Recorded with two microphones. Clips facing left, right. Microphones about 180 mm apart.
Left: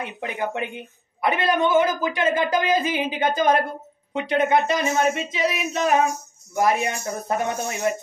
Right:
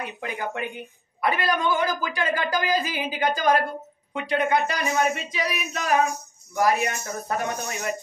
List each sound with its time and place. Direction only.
0.0 s a woman's voice: 20° left (ahead or behind)